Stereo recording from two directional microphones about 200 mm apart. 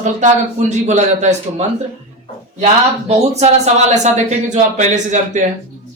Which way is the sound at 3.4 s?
35° right (ahead or behind).